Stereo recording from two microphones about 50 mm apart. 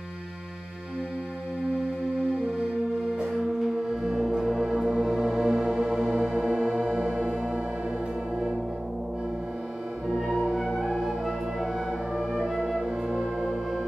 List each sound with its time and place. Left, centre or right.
3.2 s music: centre
6.1 s music: right
10.0 s music: centre
11.2 s music: centre